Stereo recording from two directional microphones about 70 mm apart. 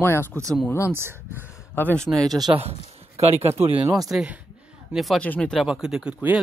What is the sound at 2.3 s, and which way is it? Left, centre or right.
Speech, right.